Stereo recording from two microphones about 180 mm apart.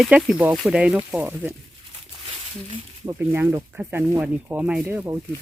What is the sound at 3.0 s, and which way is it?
Speech, 10° right (ahead or behind).